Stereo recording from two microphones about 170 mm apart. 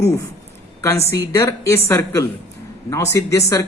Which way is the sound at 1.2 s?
20° left (ahead or behind).